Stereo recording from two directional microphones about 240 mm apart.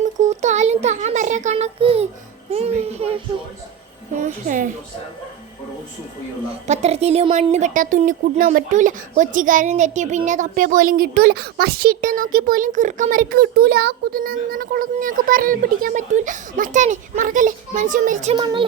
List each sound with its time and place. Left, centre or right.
0.2 s child singing: right
4.2 s a woman's voice: right
6.7 s a woman's voice: right
18.3 s speech: centre